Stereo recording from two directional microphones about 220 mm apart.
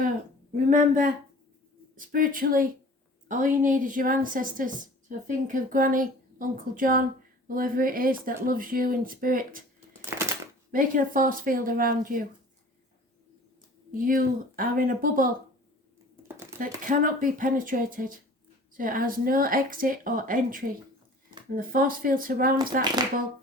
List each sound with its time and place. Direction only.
0.7 s a woman's voice: 35° right (ahead or behind)
10.7 s a woman's voice: 40° right (ahead or behind)
13.9 s a woman's voice: 40° right (ahead or behind)
16.6 s a woman's voice: 40° right (ahead or behind)